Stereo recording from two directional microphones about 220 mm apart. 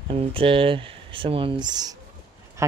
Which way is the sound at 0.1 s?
25° right (ahead or behind).